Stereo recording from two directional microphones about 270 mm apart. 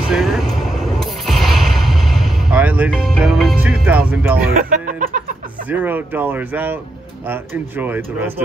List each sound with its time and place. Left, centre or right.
0.1 s a sound: centre
4.6 s music: right
5.7 s speech: centre